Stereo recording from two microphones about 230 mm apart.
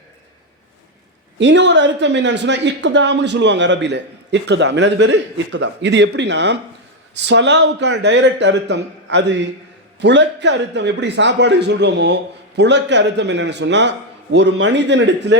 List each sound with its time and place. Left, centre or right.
1.4 s speech: right